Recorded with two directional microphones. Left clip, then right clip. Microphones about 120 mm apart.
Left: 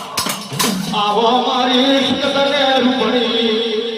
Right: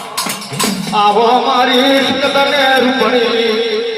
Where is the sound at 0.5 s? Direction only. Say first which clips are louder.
Right 4 dB; 35° left (ahead or behind).